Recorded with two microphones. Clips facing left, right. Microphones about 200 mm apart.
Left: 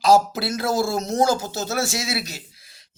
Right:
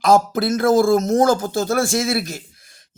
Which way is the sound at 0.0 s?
50° right (ahead or behind).